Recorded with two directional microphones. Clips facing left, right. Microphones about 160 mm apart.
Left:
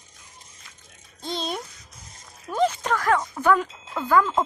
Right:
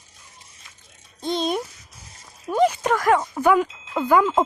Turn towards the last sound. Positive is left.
turn(degrees=-10)  # may be behind; listen again after turning